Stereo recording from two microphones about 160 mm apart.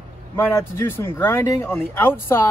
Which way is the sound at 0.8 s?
15° left (ahead or behind).